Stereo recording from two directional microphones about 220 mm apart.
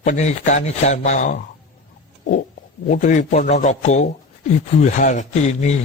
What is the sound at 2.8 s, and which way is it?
A man's voice, 35° left (ahead or behind).